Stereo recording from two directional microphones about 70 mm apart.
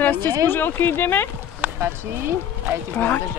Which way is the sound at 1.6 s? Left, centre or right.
Right.